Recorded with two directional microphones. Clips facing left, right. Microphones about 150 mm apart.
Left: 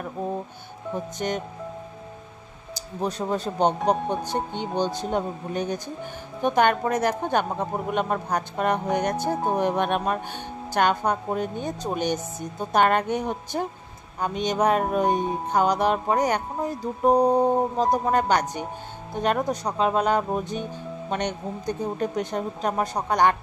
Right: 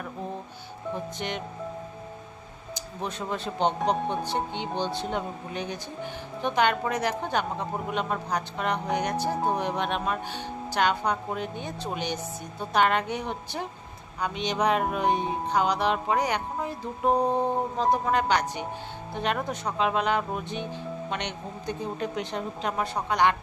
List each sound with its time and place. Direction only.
1.1 s speech: 40° left (ahead or behind)
2.7 s speech: 35° left (ahead or behind)
4.1 s music: 45° left (ahead or behind)